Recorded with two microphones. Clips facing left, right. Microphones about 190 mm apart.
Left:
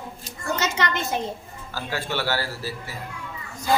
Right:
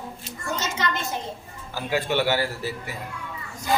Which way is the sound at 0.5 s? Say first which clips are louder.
Left 2 dB; 70° left (ahead or behind).